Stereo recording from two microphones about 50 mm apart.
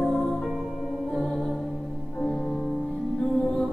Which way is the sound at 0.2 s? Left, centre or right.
Centre.